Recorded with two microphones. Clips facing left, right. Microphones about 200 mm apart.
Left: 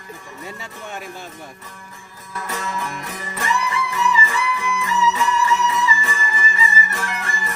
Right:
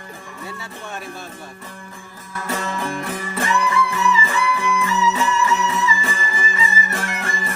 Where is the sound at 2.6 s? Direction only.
30° right (ahead or behind).